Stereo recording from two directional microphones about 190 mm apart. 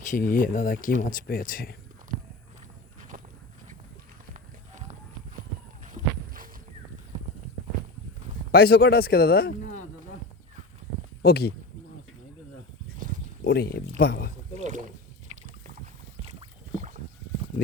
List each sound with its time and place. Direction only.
0.1 s speech: 45° left (ahead or behind)
4.4 s run: 40° right (ahead or behind)
5.8 s walk: 45° right (ahead or behind)
8.5 s speech: 55° left (ahead or behind)
11.2 s speech: 55° left (ahead or behind)
13.4 s speech: 55° left (ahead or behind)
14.5 s rowboat: 40° right (ahead or behind)
15.3 s boat: 40° right (ahead or behind)
16.2 s rowboat: 35° right (ahead or behind)